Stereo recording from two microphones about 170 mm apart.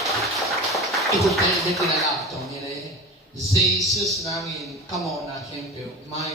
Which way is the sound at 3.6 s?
Centre (ahead or behind).